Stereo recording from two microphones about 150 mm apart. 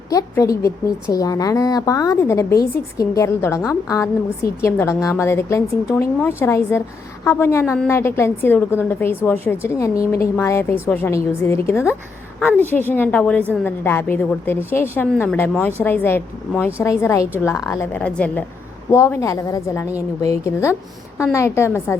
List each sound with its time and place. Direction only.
0.1 s a woman's voice: 25° left (ahead or behind)
17.9 s a woman's voice: 10° left (ahead or behind)